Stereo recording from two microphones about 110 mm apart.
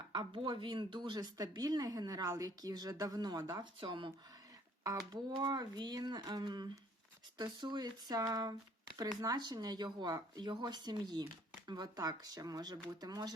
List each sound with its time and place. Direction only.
0.1 s speech: 45° right (ahead or behind)
3.8 s speech: 45° right (ahead or behind)
4.8 s speech: 35° right (ahead or behind)